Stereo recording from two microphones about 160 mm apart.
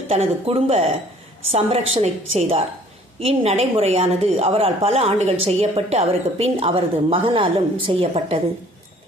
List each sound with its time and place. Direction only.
0.1 s a woman's voice: 40° right (ahead or behind)